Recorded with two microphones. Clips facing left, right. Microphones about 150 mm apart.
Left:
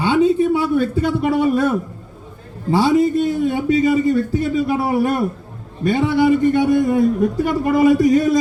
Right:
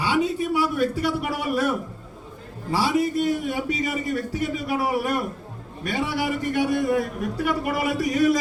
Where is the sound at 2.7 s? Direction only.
25° left (ahead or behind).